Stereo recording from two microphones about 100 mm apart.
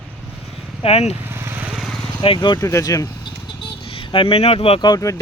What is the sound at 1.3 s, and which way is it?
Vehicle, 25° right (ahead or behind).